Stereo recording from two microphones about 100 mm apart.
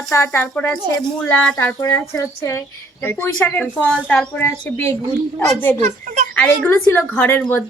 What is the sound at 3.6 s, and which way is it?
A woman's voice, 15° left (ahead or behind).